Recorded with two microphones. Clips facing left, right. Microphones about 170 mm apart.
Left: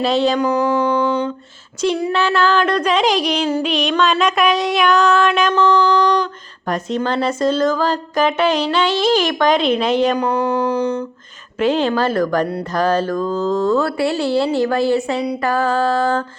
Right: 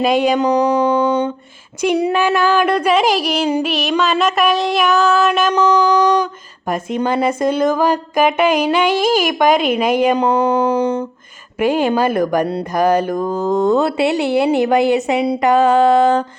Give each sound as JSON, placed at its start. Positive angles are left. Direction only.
{"t": 0.0, "sound": "speech", "side_deg": -15}
{"t": 5.5, "sound": "a sound", "side_deg": -15}
{"t": 6.7, "sound": "speech", "side_deg": -10}
{"t": 10.2, "sound": "speech", "side_deg": -20}
{"t": 11.6, "sound": "speech", "side_deg": -10}